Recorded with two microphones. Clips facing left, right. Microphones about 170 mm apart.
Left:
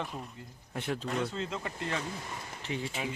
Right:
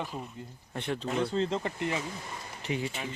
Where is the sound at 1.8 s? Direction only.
15° right (ahead or behind).